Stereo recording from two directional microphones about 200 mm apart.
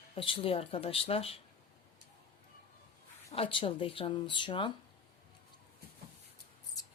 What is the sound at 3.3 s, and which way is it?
Speech, 25° left (ahead or behind).